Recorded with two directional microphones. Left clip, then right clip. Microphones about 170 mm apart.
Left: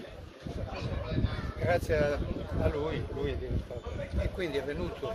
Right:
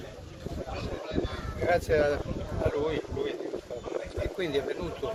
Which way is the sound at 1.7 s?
5° left (ahead or behind).